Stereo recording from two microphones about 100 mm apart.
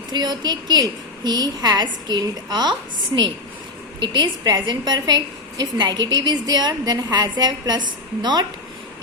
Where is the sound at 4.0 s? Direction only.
45° right (ahead or behind).